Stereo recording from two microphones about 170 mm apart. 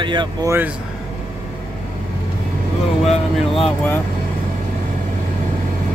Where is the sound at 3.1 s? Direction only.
35° left (ahead or behind).